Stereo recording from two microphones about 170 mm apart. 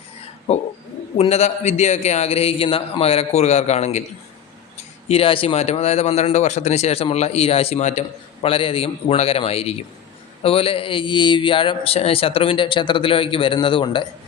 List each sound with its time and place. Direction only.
0.5 s speech: 40° left (ahead or behind)
5.0 s speech: 35° left (ahead or behind)